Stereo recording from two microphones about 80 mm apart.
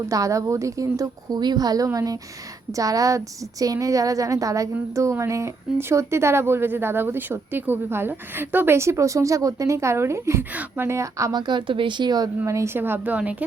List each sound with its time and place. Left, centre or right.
0.1 s a woman's voice: right
10.5 s speech: centre
10.8 s a woman's voice: right
11.3 s speech: right
12.5 s a woman's voice: right
12.7 s speech: right